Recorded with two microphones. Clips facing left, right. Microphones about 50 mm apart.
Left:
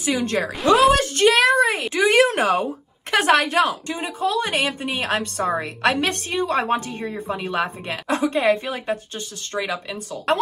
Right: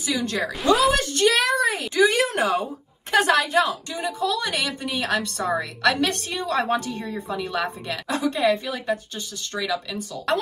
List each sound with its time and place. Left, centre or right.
0.0 s a woman's voice: left